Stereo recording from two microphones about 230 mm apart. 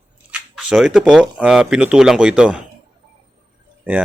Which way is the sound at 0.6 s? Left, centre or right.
Centre.